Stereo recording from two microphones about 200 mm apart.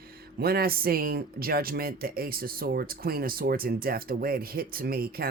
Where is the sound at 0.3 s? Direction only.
50° right (ahead or behind).